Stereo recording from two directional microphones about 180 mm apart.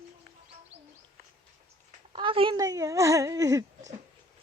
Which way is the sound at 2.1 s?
30° right (ahead or behind).